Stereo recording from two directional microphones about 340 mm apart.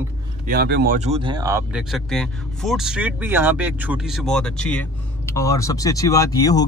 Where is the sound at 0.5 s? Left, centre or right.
Right.